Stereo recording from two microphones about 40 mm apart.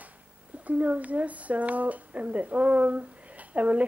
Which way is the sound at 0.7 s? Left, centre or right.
Right.